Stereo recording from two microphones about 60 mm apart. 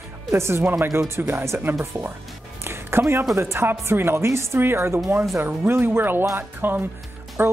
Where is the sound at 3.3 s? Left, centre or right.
Right.